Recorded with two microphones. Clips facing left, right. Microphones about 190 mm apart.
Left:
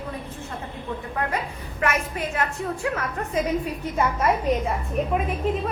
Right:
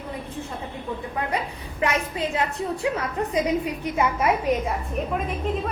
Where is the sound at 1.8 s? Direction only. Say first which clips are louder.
Right 1 dB; 15° right (ahead or behind).